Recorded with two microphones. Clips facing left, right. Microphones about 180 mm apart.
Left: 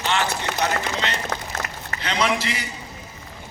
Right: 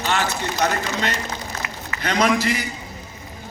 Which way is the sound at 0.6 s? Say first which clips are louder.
Right 3 dB; 45° right (ahead or behind).